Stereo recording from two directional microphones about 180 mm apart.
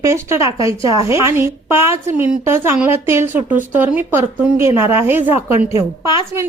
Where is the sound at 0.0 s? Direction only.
15° right (ahead or behind).